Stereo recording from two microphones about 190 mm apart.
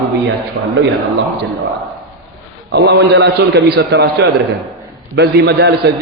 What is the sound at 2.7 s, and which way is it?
A man's voice, 60° right (ahead or behind).